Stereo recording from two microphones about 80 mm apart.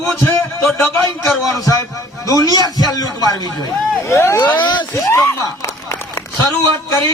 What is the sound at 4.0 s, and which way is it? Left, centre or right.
Speech, left.